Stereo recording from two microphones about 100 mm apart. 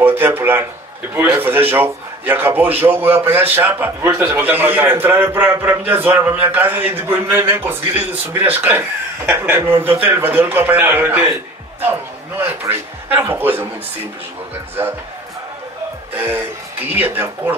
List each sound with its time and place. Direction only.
0.0 s a man's voice: 20° right (ahead or behind)
16.2 s a man's voice: 20° right (ahead or behind)